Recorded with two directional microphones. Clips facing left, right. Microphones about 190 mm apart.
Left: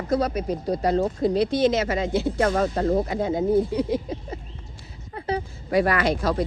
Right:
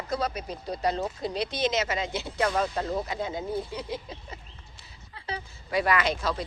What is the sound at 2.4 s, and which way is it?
Speech, 50° left (ahead or behind).